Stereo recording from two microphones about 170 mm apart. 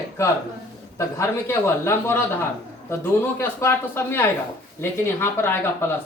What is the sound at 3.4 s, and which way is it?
Speech, 15° left (ahead or behind).